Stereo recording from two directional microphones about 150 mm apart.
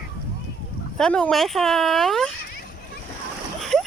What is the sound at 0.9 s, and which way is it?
Speech, 5° left (ahead or behind).